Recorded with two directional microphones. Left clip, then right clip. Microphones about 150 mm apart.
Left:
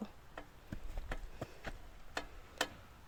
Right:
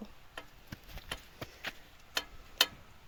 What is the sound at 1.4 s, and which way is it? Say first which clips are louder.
Chop: right 5 dB; 20° left (ahead or behind).